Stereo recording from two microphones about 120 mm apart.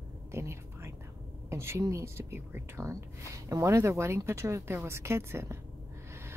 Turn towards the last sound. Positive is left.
turn(degrees=-20)  # may be behind; listen again after turning